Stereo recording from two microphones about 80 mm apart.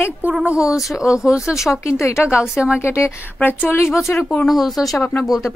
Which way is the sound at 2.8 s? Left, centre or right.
Left.